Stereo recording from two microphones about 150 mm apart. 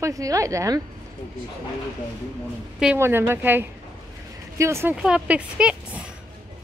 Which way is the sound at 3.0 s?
15° right (ahead or behind).